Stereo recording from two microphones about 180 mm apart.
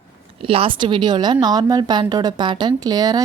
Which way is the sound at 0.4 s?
30° right (ahead or behind).